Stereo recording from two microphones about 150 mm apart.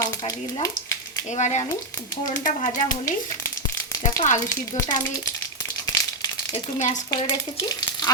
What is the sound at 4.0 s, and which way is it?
Speech, 55° left (ahead or behind).